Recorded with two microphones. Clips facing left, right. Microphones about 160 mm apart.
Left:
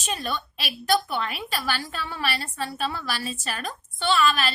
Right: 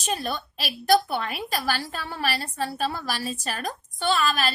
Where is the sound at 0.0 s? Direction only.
35° right (ahead or behind).